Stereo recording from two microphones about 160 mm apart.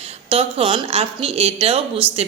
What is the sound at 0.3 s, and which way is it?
A man's voice, 35° right (ahead or behind).